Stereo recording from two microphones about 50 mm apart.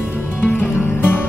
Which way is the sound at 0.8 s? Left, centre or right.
Left.